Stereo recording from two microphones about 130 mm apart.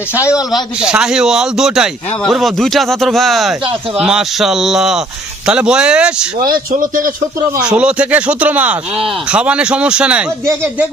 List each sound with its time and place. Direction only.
0.3 s speech: 5° right (ahead or behind)
6.5 s a man's voice: 90° right
7.8 s speech: 10° right (ahead or behind)